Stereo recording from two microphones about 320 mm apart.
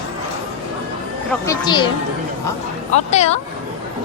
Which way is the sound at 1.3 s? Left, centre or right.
Centre.